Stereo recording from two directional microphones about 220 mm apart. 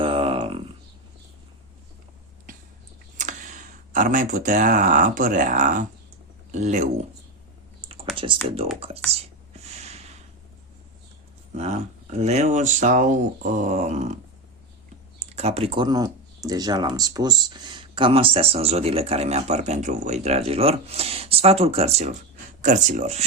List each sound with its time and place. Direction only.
0.0 s a sound: 25° right (ahead or behind)
3.2 s speech: 35° right (ahead or behind)
7.8 s computer keyboard: 25° right (ahead or behind)
8.1 s typing: 25° right (ahead or behind)
9.5 s snort: 30° right (ahead or behind)
11.5 s speech: 30° right (ahead or behind)
15.2 s speech: 30° right (ahead or behind)